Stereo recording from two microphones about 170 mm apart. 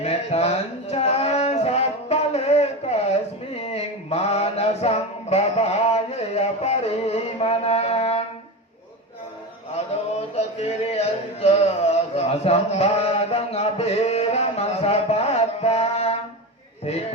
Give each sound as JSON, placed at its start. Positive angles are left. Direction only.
{"t": 0.0, "sound": "music", "side_deg": 35}
{"t": 3.7, "sound": "mantra", "side_deg": 35}
{"t": 9.7, "sound": "a sound", "side_deg": 40}